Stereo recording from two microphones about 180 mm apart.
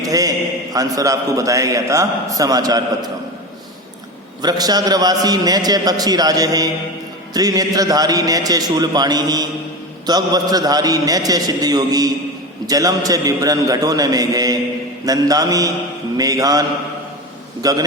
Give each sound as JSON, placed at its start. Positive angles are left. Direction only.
{"t": 0.0, "sound": "a man's voice", "side_deg": -20}
{"t": 4.4, "sound": "a man's voice", "side_deg": -20}